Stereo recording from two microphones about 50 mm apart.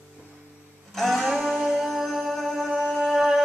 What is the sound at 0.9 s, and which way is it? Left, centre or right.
Music, centre.